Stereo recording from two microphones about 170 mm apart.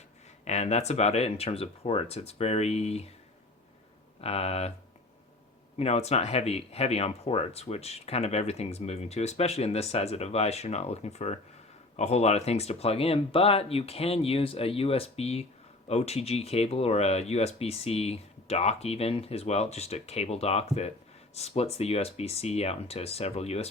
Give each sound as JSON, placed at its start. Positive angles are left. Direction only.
{"t": 0.4, "sound": "speech", "side_deg": 40}
{"t": 4.2, "sound": "speech", "side_deg": 35}
{"t": 5.7, "sound": "speech", "side_deg": 40}